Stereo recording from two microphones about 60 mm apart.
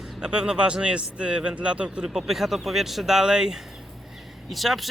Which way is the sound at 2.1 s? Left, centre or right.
Centre.